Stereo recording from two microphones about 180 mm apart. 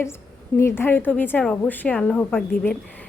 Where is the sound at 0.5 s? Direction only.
10° left (ahead or behind).